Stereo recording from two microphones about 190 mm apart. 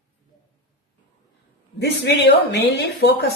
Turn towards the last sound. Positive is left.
turn(degrees=60)  # may be behind; listen again after turning